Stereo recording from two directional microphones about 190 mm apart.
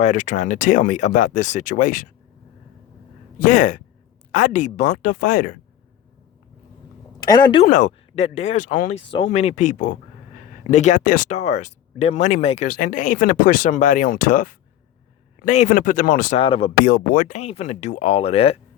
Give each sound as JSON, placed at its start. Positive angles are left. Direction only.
{"t": 0.0, "sound": "speech", "side_deg": 40}
{"t": 3.4, "sound": "speech", "side_deg": 45}
{"t": 7.2, "sound": "speech", "side_deg": 20}
{"t": 7.7, "sound": "speech", "side_deg": 40}
{"t": 9.0, "sound": "speech", "side_deg": 25}
{"t": 16.4, "sound": "speech", "side_deg": 30}
{"t": 16.8, "sound": "speech", "side_deg": 45}